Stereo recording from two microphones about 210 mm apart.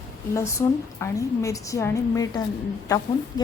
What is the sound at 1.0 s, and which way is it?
A woman's voice, 15° left (ahead or behind).